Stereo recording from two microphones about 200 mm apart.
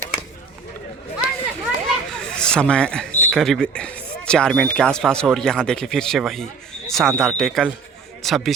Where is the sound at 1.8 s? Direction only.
5° left (ahead or behind).